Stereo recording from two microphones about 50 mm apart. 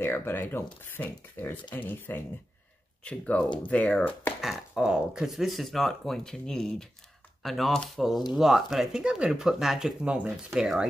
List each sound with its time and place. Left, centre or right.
0.0 s speech: left
3.0 s speech: left
4.7 s speech: centre
5.6 s speech: centre
9.0 s speech: centre
10.0 s speech: right
10.6 s speech: centre